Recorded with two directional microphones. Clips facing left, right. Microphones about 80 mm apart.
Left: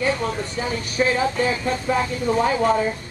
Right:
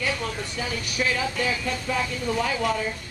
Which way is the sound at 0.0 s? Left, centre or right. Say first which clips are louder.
Left 6 dB; left.